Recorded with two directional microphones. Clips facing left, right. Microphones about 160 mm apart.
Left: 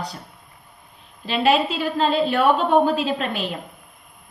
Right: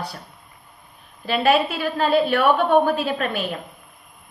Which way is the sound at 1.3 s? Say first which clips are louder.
Even; 55° right (ahead or behind).